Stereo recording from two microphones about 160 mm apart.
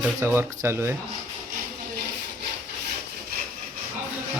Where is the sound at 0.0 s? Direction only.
15° right (ahead or behind).